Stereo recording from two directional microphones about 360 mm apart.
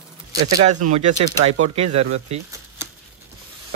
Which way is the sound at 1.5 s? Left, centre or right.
Centre.